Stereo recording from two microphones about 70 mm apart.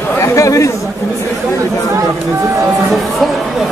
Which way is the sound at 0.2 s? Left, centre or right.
Left.